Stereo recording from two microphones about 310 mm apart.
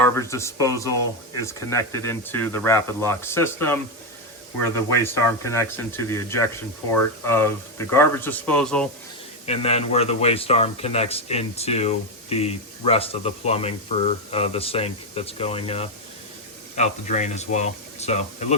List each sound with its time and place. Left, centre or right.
0.0 s speech: centre
9.5 s speech: centre